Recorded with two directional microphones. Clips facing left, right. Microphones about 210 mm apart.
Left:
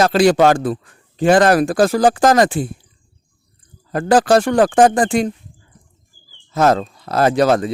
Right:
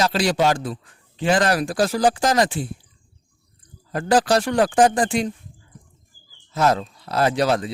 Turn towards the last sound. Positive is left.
turn(degrees=50)  # may be behind; listen again after turning